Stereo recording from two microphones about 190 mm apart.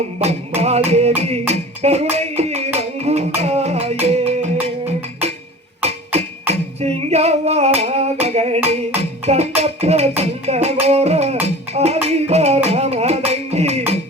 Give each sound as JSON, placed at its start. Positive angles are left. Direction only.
{"t": 0.2, "sound": "music", "side_deg": -35}